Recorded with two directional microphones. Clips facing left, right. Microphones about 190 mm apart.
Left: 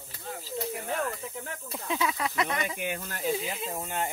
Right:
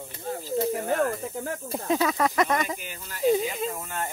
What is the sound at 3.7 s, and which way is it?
Speech, 20° left (ahead or behind).